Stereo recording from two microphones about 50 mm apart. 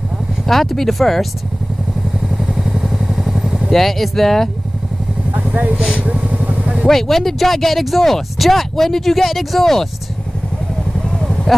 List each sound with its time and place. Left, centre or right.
0.5 s speech: centre
2.5 s vehicle: centre
3.7 s speech: centre
5.3 s speech: right
5.9 s vehicle: right
6.9 s speech: centre
11.1 s vehicle: centre